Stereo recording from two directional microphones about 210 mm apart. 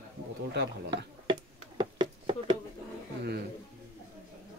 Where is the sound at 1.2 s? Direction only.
20° right (ahead or behind).